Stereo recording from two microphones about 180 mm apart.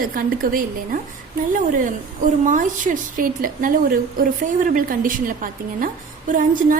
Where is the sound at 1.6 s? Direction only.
45° right (ahead or behind).